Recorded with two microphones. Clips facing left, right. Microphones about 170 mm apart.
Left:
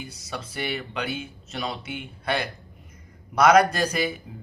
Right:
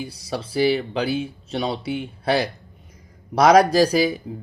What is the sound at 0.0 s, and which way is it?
Speech, 35° right (ahead or behind).